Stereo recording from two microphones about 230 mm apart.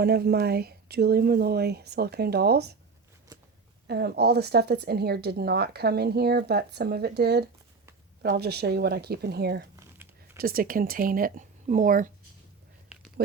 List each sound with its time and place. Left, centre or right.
0.0 s speech: right
3.8 s speech: right
13.2 s speech: right